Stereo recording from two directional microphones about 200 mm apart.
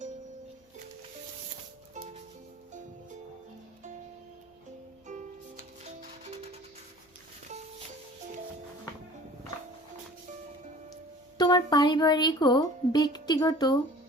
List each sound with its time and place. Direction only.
5.8 s music: 35° right (ahead or behind)
11.3 s a woman's voice: 20° left (ahead or behind)